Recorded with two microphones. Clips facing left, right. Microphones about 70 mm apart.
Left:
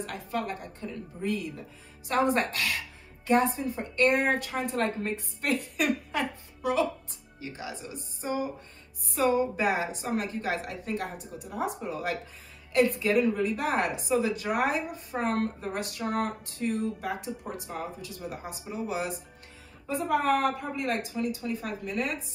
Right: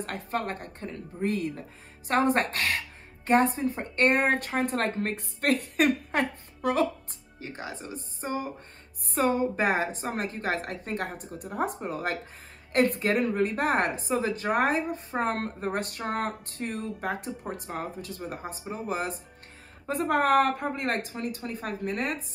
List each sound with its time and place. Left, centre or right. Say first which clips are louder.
0.0 s a woman's voice: right 1 dB; right
19.9 s speech: right 2 dB; right